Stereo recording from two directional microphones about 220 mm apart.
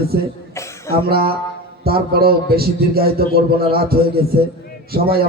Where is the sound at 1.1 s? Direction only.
45° right (ahead or behind).